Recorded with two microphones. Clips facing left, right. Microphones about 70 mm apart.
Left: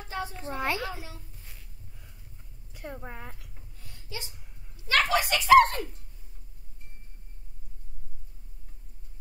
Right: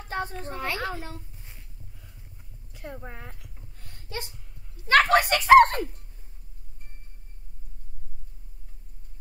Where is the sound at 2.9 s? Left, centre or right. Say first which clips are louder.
Even; centre.